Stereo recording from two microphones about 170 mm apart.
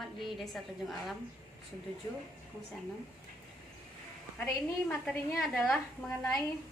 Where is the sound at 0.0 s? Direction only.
Centre (ahead or behind).